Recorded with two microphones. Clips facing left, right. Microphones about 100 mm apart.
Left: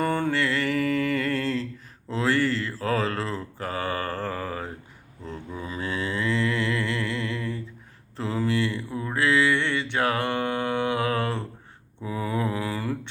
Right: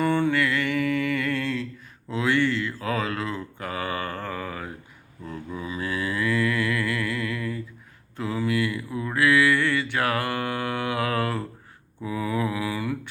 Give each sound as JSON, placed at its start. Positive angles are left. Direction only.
{"t": 0.0, "sound": "music", "side_deg": 40}
{"t": 2.0, "sound": "mantra", "side_deg": 35}
{"t": 12.0, "sound": "mantra", "side_deg": 35}